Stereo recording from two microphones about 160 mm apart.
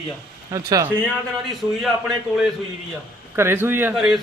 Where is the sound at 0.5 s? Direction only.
20° right (ahead or behind).